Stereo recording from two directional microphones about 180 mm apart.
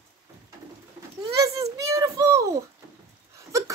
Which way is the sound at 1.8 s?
15° right (ahead or behind).